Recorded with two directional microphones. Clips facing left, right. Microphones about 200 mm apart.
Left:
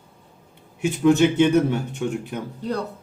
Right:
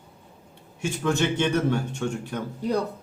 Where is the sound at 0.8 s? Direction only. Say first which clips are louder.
Left 8 dB; 20° left (ahead or behind).